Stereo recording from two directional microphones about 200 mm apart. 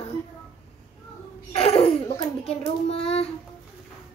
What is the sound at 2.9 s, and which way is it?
Speech, 30° left (ahead or behind).